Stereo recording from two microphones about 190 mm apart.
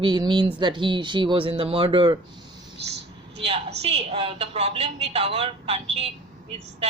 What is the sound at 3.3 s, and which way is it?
A woman's voice, 35° right (ahead or behind).